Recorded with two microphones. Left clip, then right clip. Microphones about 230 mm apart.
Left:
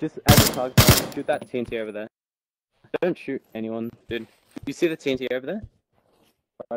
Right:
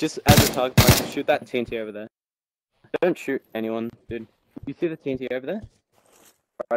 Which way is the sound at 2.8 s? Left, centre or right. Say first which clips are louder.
Right 1 dB; centre.